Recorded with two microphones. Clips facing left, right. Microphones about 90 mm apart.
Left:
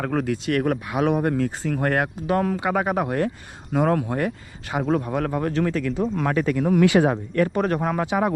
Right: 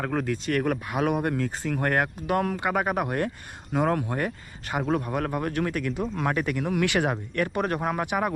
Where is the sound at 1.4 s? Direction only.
45° left (ahead or behind).